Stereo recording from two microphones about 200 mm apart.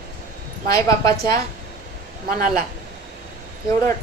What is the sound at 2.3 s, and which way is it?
Speech, 40° right (ahead or behind).